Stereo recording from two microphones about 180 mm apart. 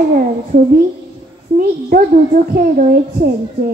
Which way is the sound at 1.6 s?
50° right (ahead or behind).